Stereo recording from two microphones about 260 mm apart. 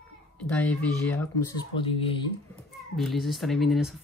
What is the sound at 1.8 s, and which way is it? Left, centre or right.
Speech, left.